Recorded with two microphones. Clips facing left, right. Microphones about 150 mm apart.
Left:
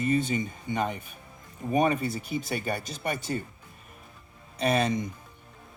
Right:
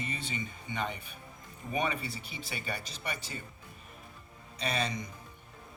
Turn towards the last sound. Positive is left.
turn(degrees=50)  # may be behind; listen again after turning